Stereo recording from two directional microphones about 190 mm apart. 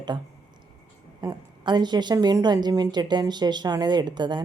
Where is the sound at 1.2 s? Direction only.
20° right (ahead or behind).